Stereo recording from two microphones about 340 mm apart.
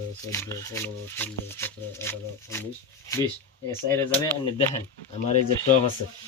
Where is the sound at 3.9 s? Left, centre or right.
Centre.